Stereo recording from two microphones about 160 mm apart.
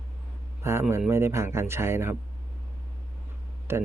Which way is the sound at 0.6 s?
15° right (ahead or behind).